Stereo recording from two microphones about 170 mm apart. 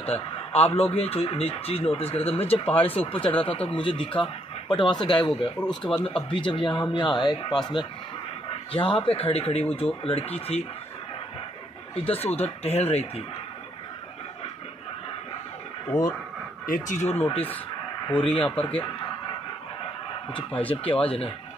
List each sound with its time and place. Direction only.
0.0 s speech: 35° left (ahead or behind)
5.6 s speech: 5° left (ahead or behind)
6.0 s speech: 30° left (ahead or behind)
11.9 s speech: 35° left (ahead or behind)
15.9 s speech: 45° left (ahead or behind)
18.4 s speech: 10° left (ahead or behind)